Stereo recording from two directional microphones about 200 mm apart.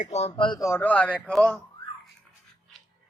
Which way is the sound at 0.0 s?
35° left (ahead or behind).